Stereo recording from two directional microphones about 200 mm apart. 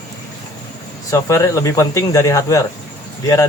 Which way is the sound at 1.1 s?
15° left (ahead or behind).